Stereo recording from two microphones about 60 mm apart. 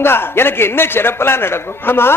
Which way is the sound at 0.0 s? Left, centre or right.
Left.